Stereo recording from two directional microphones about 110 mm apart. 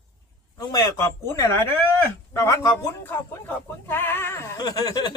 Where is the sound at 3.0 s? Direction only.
15° left (ahead or behind).